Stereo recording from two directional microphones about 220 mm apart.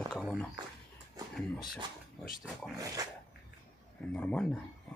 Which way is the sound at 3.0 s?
15° right (ahead or behind).